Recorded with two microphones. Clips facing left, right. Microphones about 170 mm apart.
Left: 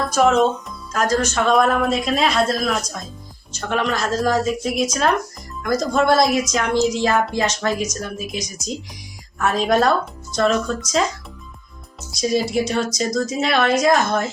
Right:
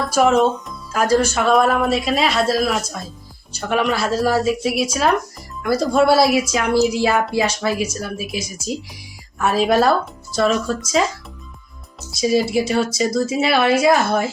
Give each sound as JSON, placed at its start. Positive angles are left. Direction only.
{"t": 0.1, "sound": "a woman's voice", "side_deg": -5}
{"t": 12.1, "sound": "speech", "side_deg": 0}